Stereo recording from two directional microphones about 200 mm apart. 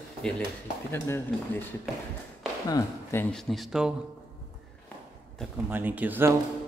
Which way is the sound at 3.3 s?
Centre (ahead or behind).